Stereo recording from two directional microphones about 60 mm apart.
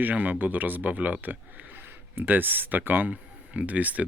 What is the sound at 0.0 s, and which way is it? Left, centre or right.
A man's voice, right.